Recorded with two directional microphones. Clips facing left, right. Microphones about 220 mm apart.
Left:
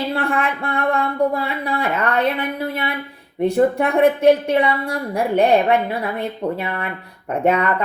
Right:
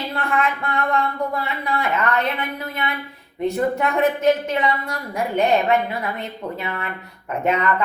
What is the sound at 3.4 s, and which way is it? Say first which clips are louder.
A woman's voice: left 4 dB; 30° left (ahead or behind).